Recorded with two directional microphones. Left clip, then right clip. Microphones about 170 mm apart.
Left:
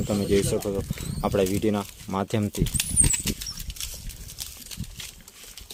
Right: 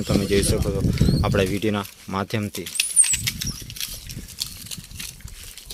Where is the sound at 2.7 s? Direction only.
45° left (ahead or behind).